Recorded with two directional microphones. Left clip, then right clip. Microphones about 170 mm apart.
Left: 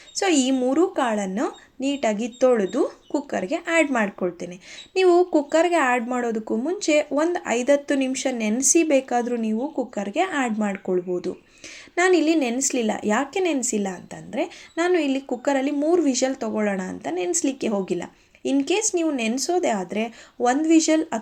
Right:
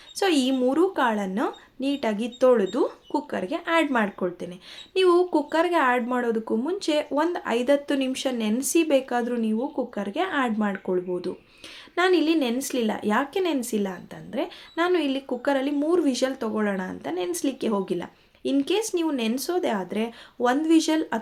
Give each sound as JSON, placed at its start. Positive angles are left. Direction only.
{"t": 0.2, "sound": "speech", "side_deg": 5}